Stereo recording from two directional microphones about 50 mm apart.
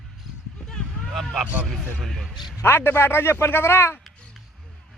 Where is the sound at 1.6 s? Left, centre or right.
Centre.